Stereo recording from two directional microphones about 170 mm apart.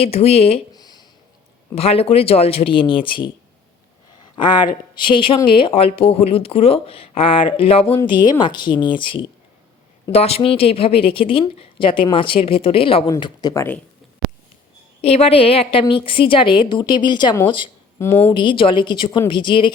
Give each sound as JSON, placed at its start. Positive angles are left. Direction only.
{"t": 0.0, "sound": "a woman's voice", "side_deg": 35}
{"t": 0.7, "sound": "a sound", "side_deg": 25}
{"t": 1.7, "sound": "a woman's voice", "side_deg": 35}
{"t": 4.4, "sound": "a woman's voice", "side_deg": 25}
{"t": 13.5, "sound": "speech", "side_deg": 15}
{"t": 15.0, "sound": "a woman's voice", "side_deg": 35}
{"t": 18.0, "sound": "speech", "side_deg": 15}
{"t": 18.3, "sound": "speech", "side_deg": 30}